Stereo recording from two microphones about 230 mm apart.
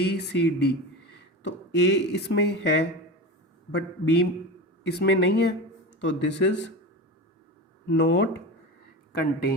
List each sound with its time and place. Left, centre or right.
0.0 s speech: left
7.9 s speech: left
9.1 s speech: left